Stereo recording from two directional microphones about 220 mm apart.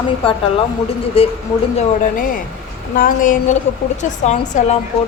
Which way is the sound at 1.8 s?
35° left (ahead or behind).